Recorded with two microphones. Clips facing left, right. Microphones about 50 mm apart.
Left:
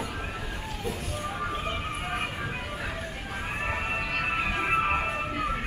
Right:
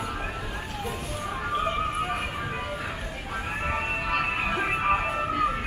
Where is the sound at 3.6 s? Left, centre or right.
Centre.